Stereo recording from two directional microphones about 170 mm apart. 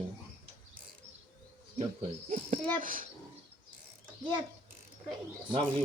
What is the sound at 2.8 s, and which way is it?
Speech, 55° right (ahead or behind).